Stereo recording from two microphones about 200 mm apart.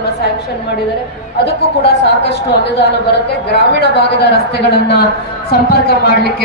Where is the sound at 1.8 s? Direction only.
55° left (ahead or behind).